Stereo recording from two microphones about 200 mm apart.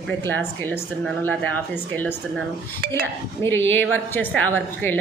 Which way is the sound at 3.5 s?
10° left (ahead or behind).